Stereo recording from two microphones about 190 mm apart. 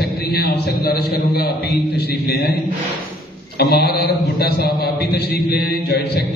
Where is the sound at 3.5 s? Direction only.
55° left (ahead or behind).